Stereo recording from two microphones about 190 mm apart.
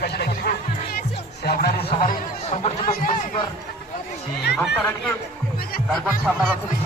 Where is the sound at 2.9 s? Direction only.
45° left (ahead or behind).